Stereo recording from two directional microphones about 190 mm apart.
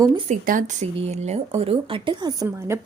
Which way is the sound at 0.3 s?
45° right (ahead or behind).